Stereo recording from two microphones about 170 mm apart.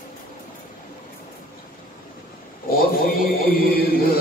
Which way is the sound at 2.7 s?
60° left (ahead or behind).